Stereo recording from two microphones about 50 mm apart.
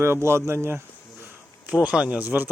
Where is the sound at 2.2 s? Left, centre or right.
Right.